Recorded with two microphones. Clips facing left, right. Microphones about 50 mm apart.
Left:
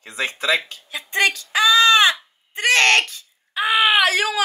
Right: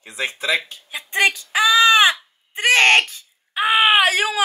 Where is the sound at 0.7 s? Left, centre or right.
Right.